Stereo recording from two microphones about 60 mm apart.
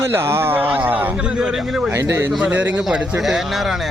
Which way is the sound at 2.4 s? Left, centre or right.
Right.